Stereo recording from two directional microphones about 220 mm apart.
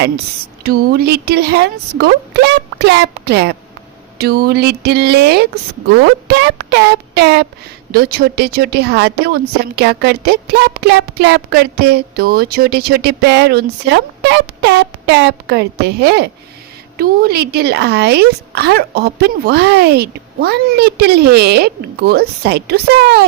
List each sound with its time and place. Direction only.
0.6 s speech: 45° right (ahead or behind)